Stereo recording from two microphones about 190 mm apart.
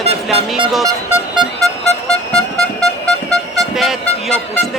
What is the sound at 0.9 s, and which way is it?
Music, 20° right (ahead or behind).